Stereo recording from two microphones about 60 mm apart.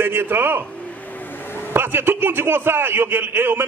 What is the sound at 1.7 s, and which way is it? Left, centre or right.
A man's voice, right.